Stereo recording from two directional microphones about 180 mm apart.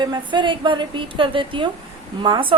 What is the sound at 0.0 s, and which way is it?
A woman's voice, 25° right (ahead or behind).